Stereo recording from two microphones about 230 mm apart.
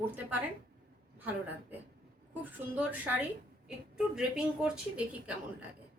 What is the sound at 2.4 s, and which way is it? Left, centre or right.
A woman's voice, centre.